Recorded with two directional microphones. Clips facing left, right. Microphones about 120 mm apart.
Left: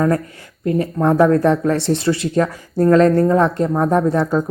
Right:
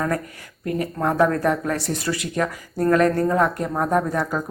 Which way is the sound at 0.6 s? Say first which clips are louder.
Left 6 dB; 30° left (ahead or behind).